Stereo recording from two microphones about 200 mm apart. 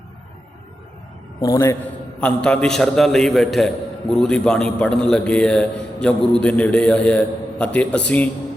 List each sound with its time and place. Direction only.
1.4 s a man's voice: 15° left (ahead or behind)
2.2 s a man's voice: 5° left (ahead or behind)